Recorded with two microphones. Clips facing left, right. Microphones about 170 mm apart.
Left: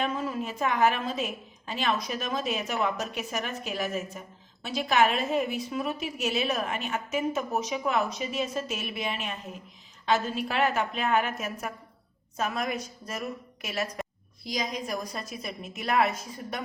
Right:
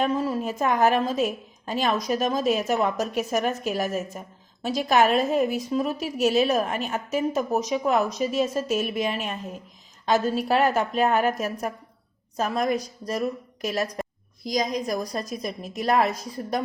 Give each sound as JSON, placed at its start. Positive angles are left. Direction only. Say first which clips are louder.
{"t": 0.0, "sound": "a woman's voice", "louder": "right 6 dB", "side_deg": -40}